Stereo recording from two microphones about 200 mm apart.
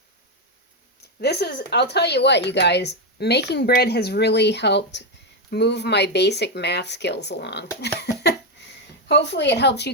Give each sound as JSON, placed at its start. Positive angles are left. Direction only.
{"t": 1.2, "sound": "speech", "side_deg": 55}
{"t": 9.0, "sound": "speech", "side_deg": 60}